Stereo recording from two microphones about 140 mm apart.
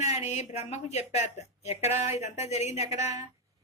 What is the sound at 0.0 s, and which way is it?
Speech, 55° left (ahead or behind).